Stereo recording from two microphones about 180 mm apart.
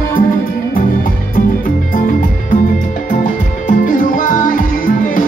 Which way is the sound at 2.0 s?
45° left (ahead or behind).